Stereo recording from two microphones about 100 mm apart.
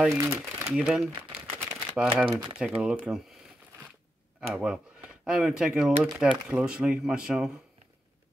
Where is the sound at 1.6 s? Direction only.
20° right (ahead or behind).